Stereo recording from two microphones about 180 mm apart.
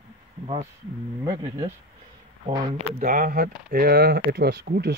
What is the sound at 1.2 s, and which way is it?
Speech, 20° right (ahead or behind).